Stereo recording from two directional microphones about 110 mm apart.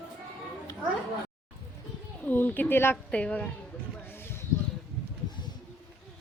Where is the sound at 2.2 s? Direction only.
15° left (ahead or behind).